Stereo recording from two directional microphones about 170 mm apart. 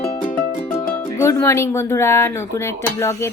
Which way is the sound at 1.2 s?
15° left (ahead or behind).